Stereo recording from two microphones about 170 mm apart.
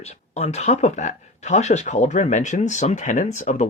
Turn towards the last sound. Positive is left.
turn(degrees=45)  # may be behind; listen again after turning